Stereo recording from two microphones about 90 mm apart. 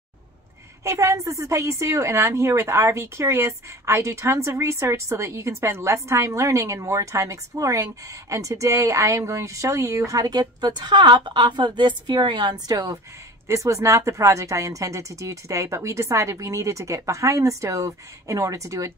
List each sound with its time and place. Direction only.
0.8 s a woman's voice: 35° right (ahead or behind)